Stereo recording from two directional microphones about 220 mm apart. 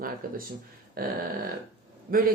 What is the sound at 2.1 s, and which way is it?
Speech, 40° right (ahead or behind).